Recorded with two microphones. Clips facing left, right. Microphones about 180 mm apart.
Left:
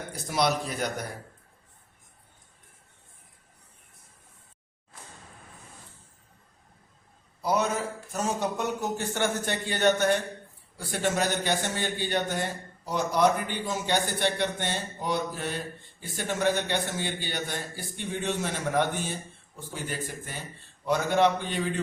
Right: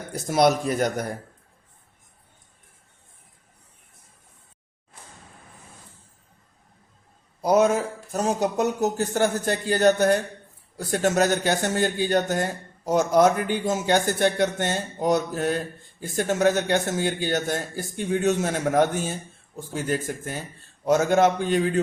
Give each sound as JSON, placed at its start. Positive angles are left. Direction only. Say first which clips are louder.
{"t": 0.3, "sound": "a man's voice", "louder": "right 7 dB", "side_deg": -50}
{"t": 7.4, "sound": "a man's voice", "louder": "right 8 dB", "side_deg": -45}